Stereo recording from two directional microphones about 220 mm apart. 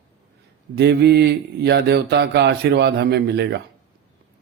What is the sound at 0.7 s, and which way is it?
Speech, 50° right (ahead or behind).